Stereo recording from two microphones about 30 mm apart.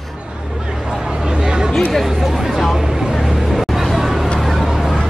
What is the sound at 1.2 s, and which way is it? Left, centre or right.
Chatter, right.